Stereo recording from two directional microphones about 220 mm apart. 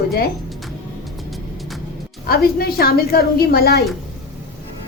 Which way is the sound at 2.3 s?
45° left (ahead or behind).